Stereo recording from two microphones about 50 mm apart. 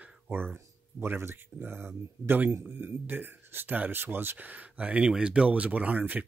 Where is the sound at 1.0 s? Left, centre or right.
Right.